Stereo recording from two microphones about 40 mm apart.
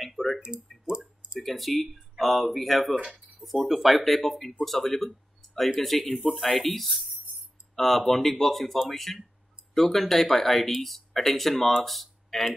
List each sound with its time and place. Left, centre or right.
0.0 s a sound: centre
0.4 s speech: right
1.4 s speech: centre